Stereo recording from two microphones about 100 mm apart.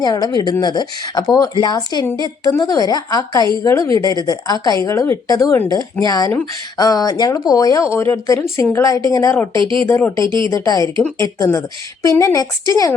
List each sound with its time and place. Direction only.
0.0 s speech: 45° left (ahead or behind)
9.6 s speech: 55° right (ahead or behind)
10.5 s speech: 35° left (ahead or behind)